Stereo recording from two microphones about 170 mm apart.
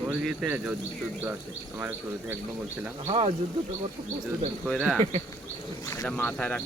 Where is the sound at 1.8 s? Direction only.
10° right (ahead or behind).